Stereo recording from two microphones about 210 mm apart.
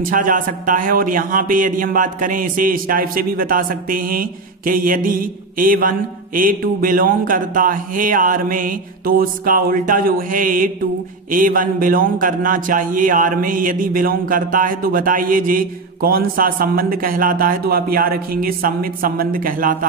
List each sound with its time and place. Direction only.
0.0 s a man's voice: 40° right (ahead or behind)